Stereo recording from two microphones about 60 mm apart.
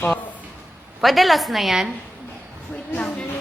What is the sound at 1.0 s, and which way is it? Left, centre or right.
Speech, centre.